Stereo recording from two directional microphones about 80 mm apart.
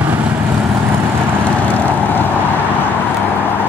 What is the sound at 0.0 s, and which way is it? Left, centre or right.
Vehicle, centre.